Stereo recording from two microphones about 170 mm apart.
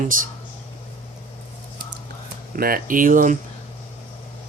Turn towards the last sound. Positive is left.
turn(degrees=-50)  # may be behind; listen again after turning